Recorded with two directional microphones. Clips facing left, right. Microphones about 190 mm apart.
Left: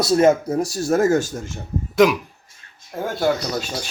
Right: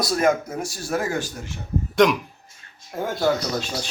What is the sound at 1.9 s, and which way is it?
Speech, 5° left (ahead or behind).